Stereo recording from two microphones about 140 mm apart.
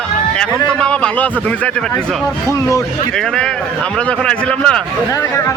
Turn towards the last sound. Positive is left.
turn(degrees=5)  # may be behind; listen again after turning